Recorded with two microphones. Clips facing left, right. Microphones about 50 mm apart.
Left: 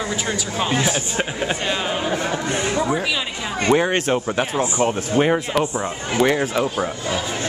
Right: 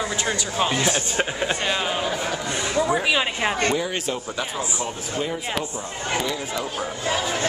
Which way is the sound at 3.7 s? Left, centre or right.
Left.